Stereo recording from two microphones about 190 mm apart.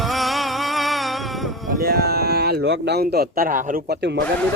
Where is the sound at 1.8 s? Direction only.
55° right (ahead or behind).